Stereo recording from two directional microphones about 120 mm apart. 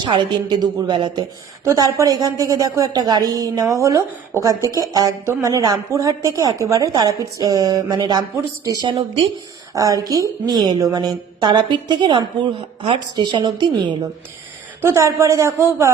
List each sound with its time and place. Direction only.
0.0 s a woman's voice: 40° right (ahead or behind)
1.6 s a woman's voice: 25° right (ahead or behind)
14.8 s a woman's voice: 20° right (ahead or behind)